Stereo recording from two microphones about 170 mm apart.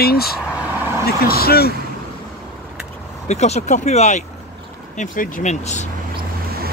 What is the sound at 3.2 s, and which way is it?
Speech, 40° left (ahead or behind).